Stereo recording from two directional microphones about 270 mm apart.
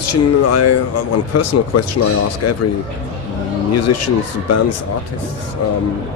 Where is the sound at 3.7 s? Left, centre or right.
Left.